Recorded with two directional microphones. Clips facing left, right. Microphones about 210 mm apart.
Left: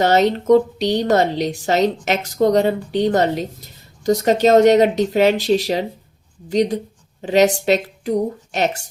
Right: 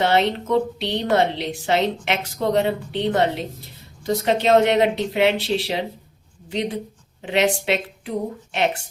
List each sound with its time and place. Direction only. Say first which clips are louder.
0.0 s a woman's voice: left 4 dB; 45° left (ahead or behind)